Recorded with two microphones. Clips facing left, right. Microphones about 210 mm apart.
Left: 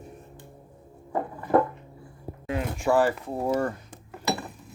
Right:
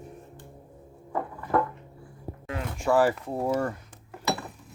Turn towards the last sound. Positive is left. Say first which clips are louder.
# left 1 dB
turn(degrees=0)  # may be behind; listen again after turning